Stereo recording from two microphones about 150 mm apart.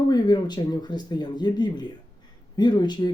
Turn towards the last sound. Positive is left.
turn(degrees=30)  # may be behind; listen again after turning